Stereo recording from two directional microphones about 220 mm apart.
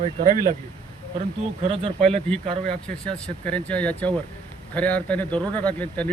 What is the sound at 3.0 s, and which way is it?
Speech, 5° left (ahead or behind).